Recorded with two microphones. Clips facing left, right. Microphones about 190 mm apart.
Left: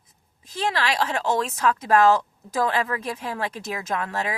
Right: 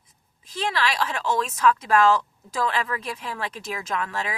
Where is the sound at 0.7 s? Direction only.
45° left (ahead or behind).